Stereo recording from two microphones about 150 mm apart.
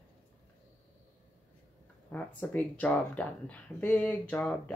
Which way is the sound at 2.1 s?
10° left (ahead or behind).